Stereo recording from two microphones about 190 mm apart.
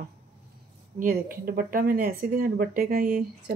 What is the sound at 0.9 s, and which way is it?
Speech, 50° right (ahead or behind).